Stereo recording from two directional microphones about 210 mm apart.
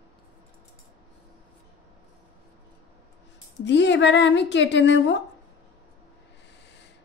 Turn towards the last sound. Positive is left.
turn(degrees=60)  # may be behind; listen again after turning